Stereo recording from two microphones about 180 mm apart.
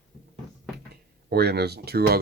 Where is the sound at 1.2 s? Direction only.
60° right (ahead or behind).